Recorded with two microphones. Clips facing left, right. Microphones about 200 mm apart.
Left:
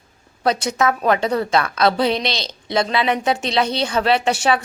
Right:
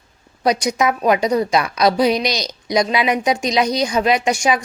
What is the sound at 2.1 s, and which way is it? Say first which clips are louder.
Speech: right 3 dB; 25° left (ahead or behind).